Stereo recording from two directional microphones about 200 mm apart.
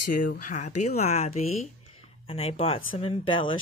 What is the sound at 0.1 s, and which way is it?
Speech, 40° left (ahead or behind).